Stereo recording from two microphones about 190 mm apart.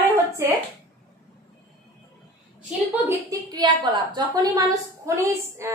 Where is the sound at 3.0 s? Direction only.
20° right (ahead or behind).